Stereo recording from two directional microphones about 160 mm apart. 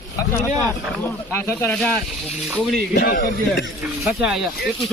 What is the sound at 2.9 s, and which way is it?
Speech, 75° left (ahead or behind).